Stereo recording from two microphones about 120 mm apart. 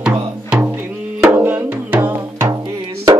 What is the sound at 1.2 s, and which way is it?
Music, 20° right (ahead or behind).